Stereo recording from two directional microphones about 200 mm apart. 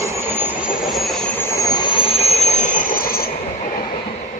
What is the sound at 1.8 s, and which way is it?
Train, 25° left (ahead or behind).